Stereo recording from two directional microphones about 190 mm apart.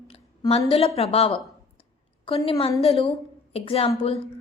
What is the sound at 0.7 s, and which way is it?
Speech, 30° left (ahead or behind).